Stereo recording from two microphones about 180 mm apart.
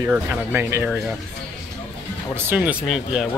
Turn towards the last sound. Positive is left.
turn(degrees=-5)  # may be behind; listen again after turning